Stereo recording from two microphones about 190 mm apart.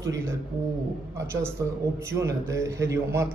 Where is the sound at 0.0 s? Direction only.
15° right (ahead or behind).